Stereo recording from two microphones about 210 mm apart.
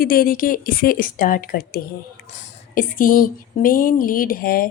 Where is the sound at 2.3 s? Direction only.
40° left (ahead or behind).